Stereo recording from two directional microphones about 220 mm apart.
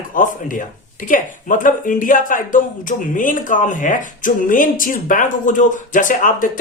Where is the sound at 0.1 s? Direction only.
40° left (ahead or behind).